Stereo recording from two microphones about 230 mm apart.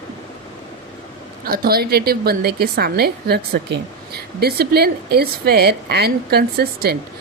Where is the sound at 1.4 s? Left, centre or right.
Right.